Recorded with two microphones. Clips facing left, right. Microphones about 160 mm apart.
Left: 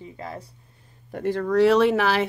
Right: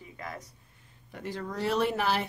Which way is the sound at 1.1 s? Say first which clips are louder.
Left 14 dB; 60° left (ahead or behind).